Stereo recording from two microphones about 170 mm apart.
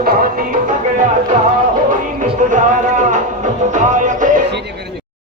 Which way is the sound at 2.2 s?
50° right (ahead or behind).